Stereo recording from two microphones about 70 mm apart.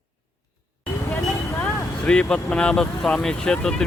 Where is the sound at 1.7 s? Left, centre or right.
Centre.